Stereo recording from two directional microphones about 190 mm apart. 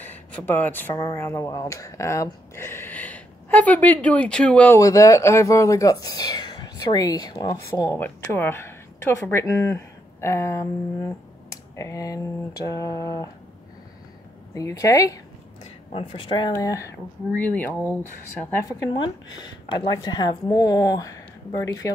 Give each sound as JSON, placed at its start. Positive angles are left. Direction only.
{"t": 0.0, "sound": "speech", "side_deg": 10}
{"t": 11.7, "sound": "speech", "side_deg": 15}
{"t": 14.5, "sound": "speech", "side_deg": 15}
{"t": 15.6, "sound": "speech", "side_deg": 30}